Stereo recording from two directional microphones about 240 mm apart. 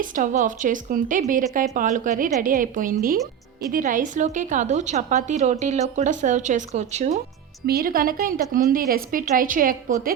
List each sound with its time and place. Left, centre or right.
0.0 s a woman's voice: right